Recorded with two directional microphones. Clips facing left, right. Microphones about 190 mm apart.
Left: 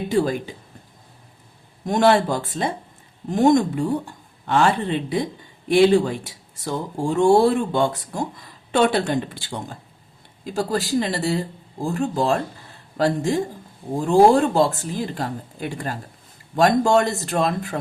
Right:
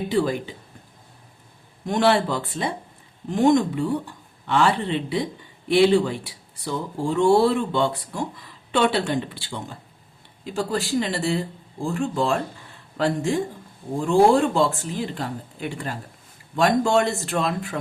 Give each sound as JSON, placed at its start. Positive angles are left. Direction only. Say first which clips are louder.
{"t": 0.1, "sound": "speech", "louder": "left 2 dB", "side_deg": 45}
{"t": 1.9, "sound": "speech", "louder": "left 3 dB", "side_deg": 45}